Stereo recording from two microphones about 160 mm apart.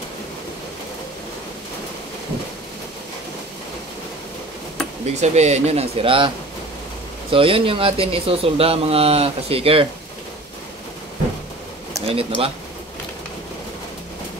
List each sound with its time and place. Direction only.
5.0 s speech: 45° right (ahead or behind)
12.1 s speech: 35° right (ahead or behind)